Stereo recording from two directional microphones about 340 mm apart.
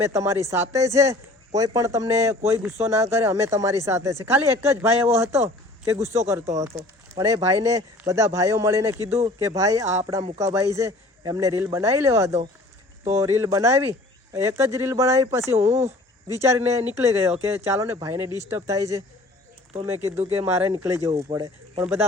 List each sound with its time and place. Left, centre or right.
0.0 s speech: centre